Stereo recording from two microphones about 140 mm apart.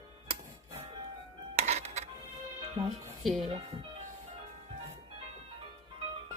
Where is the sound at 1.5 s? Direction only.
50° right (ahead or behind).